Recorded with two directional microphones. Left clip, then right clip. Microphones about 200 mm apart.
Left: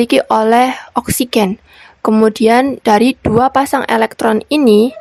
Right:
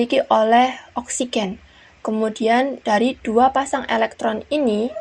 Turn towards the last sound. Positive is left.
turn(degrees=45)  # may be behind; listen again after turning